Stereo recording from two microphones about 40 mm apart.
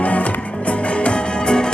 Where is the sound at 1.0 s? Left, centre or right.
Left.